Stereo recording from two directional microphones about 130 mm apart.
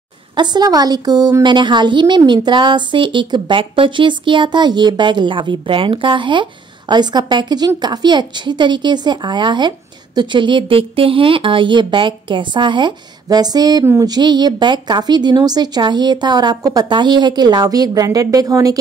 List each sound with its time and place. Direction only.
0.4 s a woman's voice: 35° right (ahead or behind)